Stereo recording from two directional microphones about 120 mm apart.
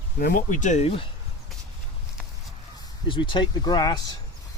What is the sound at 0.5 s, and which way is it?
Speech, 85° left.